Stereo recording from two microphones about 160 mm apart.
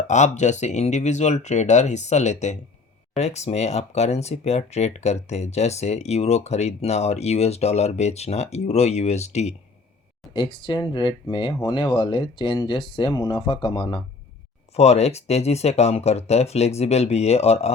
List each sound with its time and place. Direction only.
0.1 s speech: 45° left (ahead or behind)
10.3 s speech: 30° left (ahead or behind)
14.7 s speech: 40° left (ahead or behind)